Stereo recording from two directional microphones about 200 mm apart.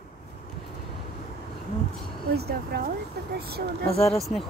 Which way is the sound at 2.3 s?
50° right (ahead or behind).